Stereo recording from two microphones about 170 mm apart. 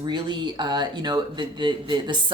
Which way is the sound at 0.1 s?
25° right (ahead or behind).